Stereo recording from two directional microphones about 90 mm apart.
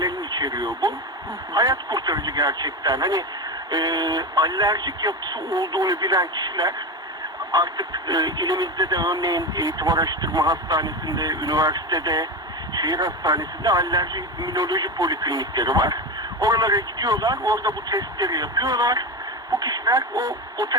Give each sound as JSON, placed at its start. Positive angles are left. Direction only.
{"t": 0.0, "sound": "radio", "side_deg": -50}
{"t": 1.5, "sound": "speech", "side_deg": -45}